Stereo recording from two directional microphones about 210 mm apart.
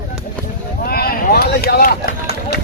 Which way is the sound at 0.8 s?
45° left (ahead or behind).